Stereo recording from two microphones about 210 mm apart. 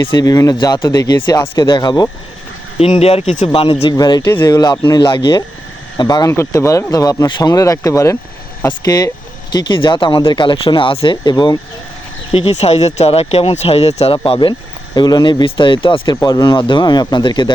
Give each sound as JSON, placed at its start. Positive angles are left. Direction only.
{"t": 0.1, "sound": "speech", "side_deg": 20}